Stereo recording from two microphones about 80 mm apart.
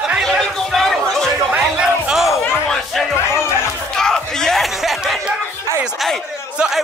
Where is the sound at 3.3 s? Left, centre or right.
Left.